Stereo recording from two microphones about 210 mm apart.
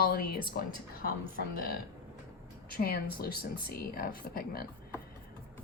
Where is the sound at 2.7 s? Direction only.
45° left (ahead or behind).